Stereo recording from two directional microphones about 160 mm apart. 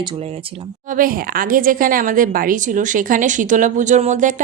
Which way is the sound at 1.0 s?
60° right (ahead or behind).